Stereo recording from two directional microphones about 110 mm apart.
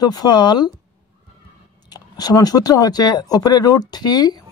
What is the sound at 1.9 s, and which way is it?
Speech, 35° left (ahead or behind).